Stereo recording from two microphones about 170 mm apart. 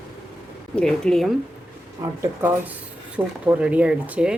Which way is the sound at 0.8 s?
5° left (ahead or behind).